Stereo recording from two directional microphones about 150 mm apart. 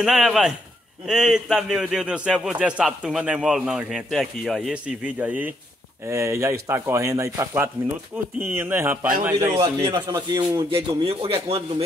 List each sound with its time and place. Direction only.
0.0 s a man's voice: centre (ahead or behind); by 9.6 s 20° right (ahead or behind)
9.6 s speech: 30° right (ahead or behind)
11.1 s speech: 40° right (ahead or behind)